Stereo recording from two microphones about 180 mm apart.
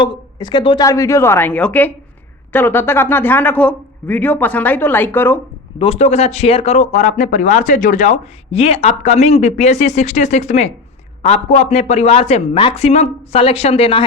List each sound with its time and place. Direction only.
0.0 s a man's voice: 25° left (ahead or behind)
5.8 s speech: 35° left (ahead or behind)